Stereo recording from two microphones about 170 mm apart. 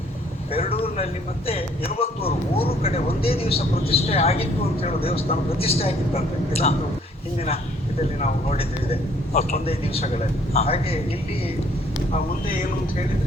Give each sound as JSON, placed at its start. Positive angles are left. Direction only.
{"t": 0.5, "sound": "vehicle", "side_deg": 35}
{"t": 1.5, "sound": "speech", "side_deg": 35}